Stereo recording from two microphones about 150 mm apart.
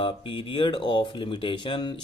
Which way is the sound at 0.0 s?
35° left (ahead or behind).